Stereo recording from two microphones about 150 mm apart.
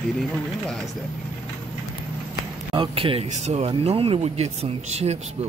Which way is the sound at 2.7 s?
35° right (ahead or behind).